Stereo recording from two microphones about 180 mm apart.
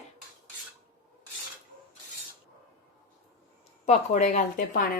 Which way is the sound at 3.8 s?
40° left (ahead or behind).